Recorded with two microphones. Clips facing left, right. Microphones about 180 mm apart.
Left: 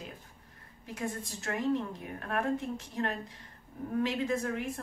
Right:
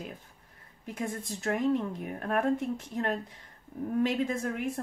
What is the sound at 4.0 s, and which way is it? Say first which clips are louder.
Speech: right 2 dB; 50° right (ahead or behind).